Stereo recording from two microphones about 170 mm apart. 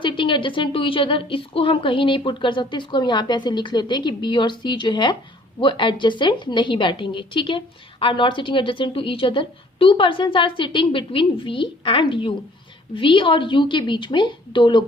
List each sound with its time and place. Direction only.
0.0 s a woman's voice: 30° left (ahead or behind)